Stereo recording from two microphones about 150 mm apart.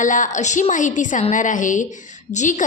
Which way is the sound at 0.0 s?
55° left (ahead or behind).